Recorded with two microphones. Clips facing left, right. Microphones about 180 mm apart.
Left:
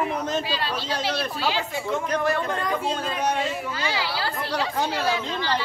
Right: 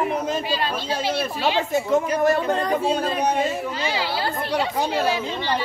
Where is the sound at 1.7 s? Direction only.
45° right (ahead or behind).